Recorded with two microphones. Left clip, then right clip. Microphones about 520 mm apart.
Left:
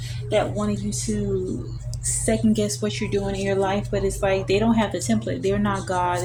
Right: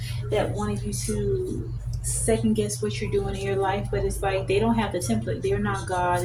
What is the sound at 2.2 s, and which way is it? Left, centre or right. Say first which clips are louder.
Speech: left 1 dB; centre.